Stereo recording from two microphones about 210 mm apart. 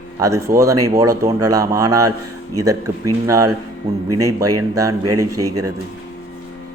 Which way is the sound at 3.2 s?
15° right (ahead or behind).